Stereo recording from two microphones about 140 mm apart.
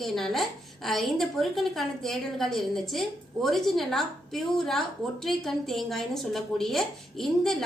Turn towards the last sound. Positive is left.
turn(degrees=0)  # may be behind; listen again after turning